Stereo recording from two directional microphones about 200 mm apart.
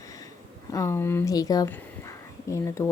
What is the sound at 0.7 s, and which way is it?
Speech, 15° left (ahead or behind).